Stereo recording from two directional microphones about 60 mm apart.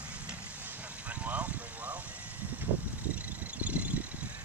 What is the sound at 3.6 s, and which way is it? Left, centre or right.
Vehicle, right.